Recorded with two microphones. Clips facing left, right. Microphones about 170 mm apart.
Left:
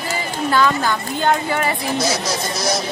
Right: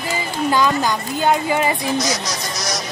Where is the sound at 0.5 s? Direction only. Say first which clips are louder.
Left 1 dB; 15° right (ahead or behind).